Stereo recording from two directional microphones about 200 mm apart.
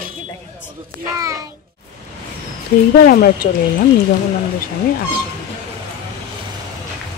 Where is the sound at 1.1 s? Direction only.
15° right (ahead or behind).